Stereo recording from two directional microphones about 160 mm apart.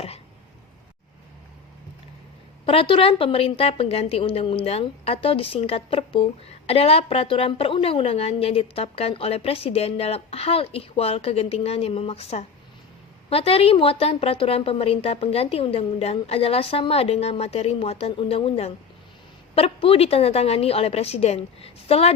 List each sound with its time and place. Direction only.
2.6 s a woman's voice: 35° left (ahead or behind)